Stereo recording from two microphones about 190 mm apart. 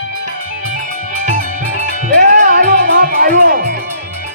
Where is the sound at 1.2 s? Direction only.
40° right (ahead or behind).